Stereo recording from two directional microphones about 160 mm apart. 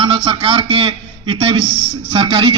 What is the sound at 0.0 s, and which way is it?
A man's voice, 35° right (ahead or behind).